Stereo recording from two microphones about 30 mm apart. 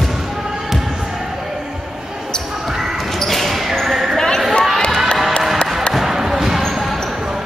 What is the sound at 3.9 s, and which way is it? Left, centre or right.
Basketball bounce, centre.